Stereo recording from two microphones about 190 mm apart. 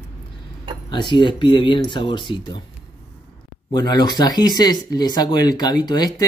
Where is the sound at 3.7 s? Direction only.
20° left (ahead or behind).